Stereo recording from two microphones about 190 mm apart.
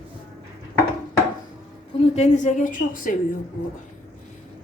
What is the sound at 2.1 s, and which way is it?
A woman's voice, 40° left (ahead or behind).